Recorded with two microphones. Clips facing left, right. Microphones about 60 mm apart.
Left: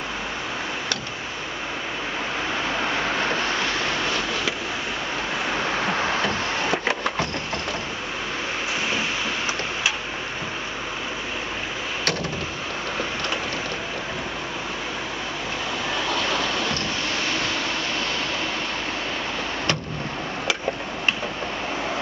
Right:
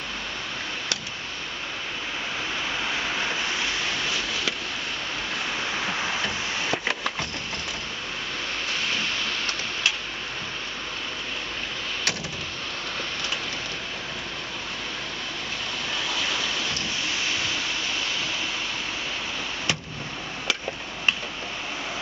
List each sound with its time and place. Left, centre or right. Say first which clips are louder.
2.7 s vehicle: left 4 dB; left
3.3 s waves: left 4 dB; left
3.6 s a sound: left 4 dB; centre
5.5 s a sound: left 6 dB; left
6.2 s vehicle: left 4 dB; centre
16.1 s rain: left 5 dB; centre